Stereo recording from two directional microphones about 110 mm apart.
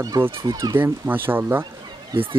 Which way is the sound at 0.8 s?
20° right (ahead or behind).